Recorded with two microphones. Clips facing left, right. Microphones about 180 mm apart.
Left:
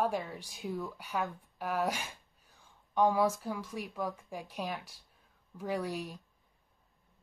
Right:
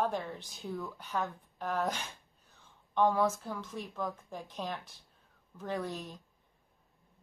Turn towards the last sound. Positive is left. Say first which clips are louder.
# left 2 dB
turn(degrees=10)  # may be behind; listen again after turning